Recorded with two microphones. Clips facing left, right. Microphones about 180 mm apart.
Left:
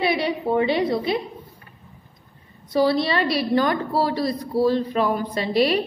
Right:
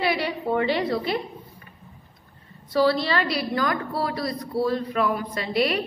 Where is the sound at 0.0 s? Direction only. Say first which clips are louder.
Left 3 dB; 20° left (ahead or behind).